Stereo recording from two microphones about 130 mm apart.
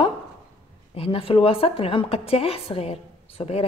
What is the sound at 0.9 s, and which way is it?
A woman's voice, 45° left (ahead or behind).